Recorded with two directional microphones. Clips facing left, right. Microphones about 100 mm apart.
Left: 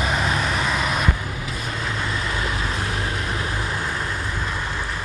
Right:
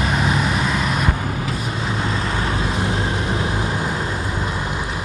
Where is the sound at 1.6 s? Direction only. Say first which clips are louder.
Right 3 dB; 20° right (ahead or behind).